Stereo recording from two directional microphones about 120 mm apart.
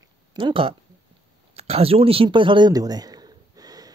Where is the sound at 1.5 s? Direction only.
55° right (ahead or behind); by 3.9 s 30° right (ahead or behind).